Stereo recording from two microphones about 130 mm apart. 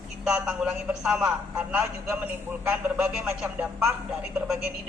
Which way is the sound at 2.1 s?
20° right (ahead or behind).